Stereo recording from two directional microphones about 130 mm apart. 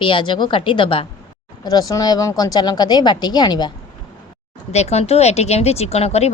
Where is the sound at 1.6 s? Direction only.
30° left (ahead or behind).